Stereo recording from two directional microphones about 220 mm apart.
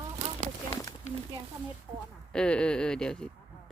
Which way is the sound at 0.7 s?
15° left (ahead or behind).